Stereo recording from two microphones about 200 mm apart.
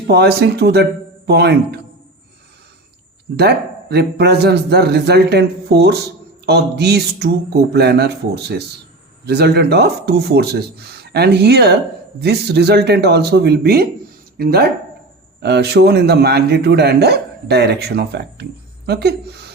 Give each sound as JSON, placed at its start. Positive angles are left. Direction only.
{"t": 0.1, "sound": "a man's voice", "side_deg": -55}
{"t": 3.3, "sound": "a man's voice", "side_deg": -55}